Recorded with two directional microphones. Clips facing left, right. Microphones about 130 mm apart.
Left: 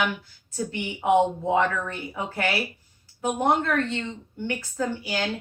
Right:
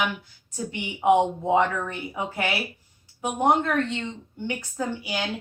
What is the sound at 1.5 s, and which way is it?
A woman's voice, 20° right (ahead or behind).